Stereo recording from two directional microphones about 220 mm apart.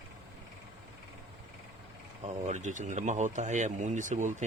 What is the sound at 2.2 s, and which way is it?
Speech, 30° right (ahead or behind).